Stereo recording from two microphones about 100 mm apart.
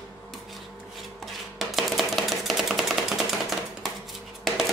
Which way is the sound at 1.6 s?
Centre (ahead or behind).